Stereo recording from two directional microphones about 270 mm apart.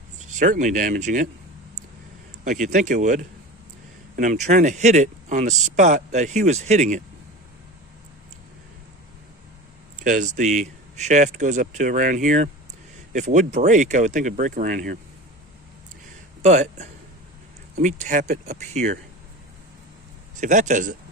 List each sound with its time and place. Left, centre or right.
0.3 s speech: right
2.4 s speech: right
10.0 s speech: right
16.4 s speech: right
20.4 s speech: right